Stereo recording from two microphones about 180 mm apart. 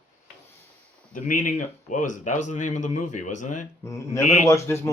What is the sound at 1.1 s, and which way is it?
Speech, 45° left (ahead or behind).